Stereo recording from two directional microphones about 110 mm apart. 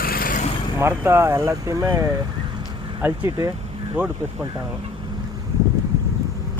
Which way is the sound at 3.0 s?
15° right (ahead or behind).